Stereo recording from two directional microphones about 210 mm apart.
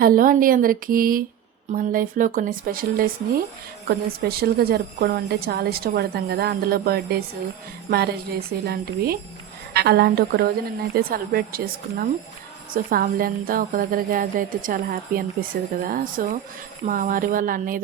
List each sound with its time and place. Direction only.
0.0 s a woman's voice: 40° right (ahead or behind)